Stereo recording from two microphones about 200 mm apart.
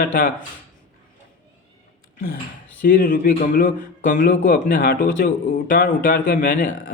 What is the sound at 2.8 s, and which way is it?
Speech, 45° left (ahead or behind).